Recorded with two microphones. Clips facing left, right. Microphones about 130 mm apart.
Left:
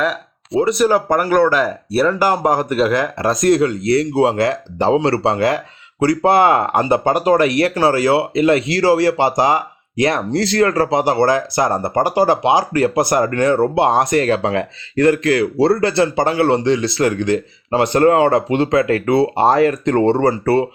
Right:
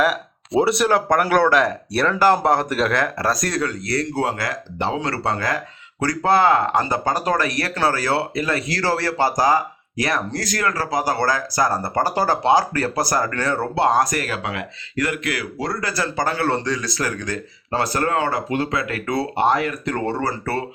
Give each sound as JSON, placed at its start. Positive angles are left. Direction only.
{"t": 0.6, "sound": "speech", "side_deg": 0}
{"t": 3.2, "sound": "speech", "side_deg": 25}
{"t": 17.9, "sound": "speech", "side_deg": 30}